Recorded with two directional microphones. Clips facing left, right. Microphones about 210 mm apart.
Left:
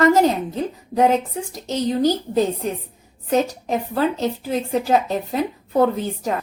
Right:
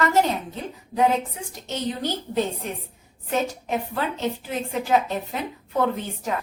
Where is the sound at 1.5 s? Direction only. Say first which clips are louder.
Left 7 dB; 40° left (ahead or behind).